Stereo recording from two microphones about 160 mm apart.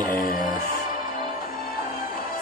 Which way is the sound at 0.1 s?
60° left (ahead or behind).